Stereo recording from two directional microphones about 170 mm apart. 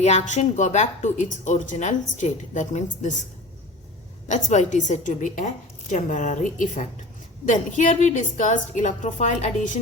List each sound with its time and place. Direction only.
0.0 s speech: 40° left (ahead or behind)
4.3 s speech: 45° left (ahead or behind)